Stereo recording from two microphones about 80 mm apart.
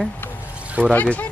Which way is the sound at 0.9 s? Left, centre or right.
Centre.